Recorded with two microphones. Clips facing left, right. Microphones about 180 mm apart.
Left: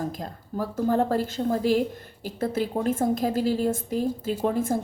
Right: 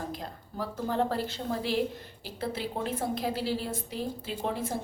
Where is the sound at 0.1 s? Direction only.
45° left (ahead or behind).